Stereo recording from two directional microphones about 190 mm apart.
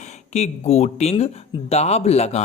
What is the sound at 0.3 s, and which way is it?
Speech, 35° left (ahead or behind).